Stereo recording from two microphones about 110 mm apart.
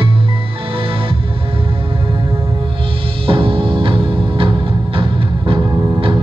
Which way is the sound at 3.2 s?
55° right (ahead or behind).